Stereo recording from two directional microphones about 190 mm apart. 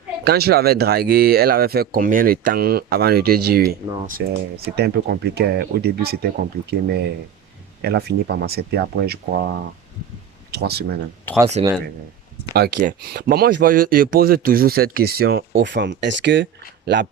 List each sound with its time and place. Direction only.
0.3 s speech: 55° right (ahead or behind)
10.5 s speech: 55° right (ahead or behind)
11.3 s speech: 10° left (ahead or behind)
12.5 s speech: 55° right (ahead or behind)